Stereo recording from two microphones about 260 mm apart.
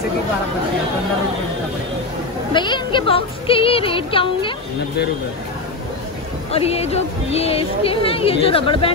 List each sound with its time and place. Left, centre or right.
2.5 s speech: centre
6.5 s speech: left